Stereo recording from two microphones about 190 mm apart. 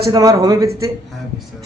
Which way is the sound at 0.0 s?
20° right (ahead or behind).